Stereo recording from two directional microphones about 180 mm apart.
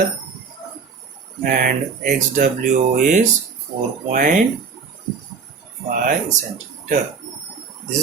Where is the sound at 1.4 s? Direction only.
50° right (ahead or behind).